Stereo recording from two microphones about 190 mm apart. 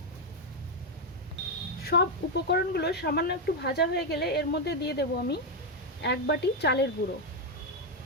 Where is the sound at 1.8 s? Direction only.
55° left (ahead or behind).